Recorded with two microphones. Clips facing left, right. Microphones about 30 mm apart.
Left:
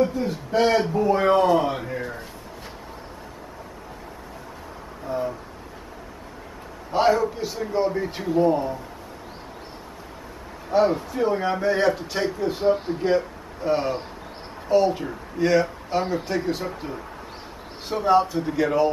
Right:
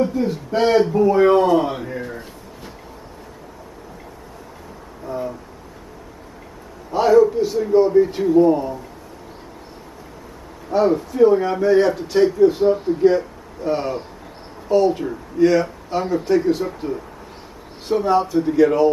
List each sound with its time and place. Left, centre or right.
0.0 s a man's voice: centre
5.0 s a sound: centre
7.1 s speech: centre
10.9 s speech: centre
11.1 s speech: centre